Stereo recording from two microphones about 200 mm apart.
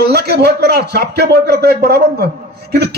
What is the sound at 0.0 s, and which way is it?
Speech, 55° right (ahead or behind).